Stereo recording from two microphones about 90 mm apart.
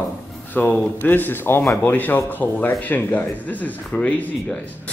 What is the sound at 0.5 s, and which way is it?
Speech, 20° left (ahead or behind).